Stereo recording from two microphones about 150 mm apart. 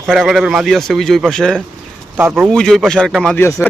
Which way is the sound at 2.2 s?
10° right (ahead or behind).